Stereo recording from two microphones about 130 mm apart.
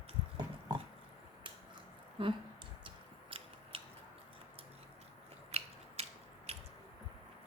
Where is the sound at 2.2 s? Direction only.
40° right (ahead or behind).